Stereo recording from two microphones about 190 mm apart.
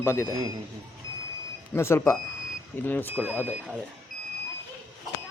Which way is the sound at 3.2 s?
10° right (ahead or behind).